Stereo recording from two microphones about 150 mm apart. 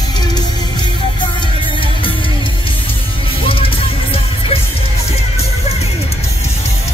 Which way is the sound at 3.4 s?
40° left (ahead or behind).